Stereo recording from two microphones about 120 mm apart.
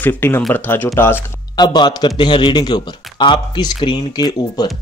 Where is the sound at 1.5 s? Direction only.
35° left (ahead or behind).